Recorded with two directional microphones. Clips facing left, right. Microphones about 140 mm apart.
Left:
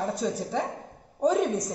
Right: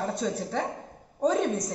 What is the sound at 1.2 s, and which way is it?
Speech, 20° left (ahead or behind).